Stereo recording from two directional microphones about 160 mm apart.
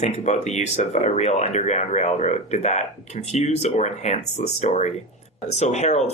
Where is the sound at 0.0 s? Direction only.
45° left (ahead or behind).